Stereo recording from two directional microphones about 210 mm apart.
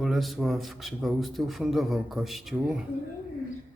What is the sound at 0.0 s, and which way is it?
A man's voice, centre (ahead or behind).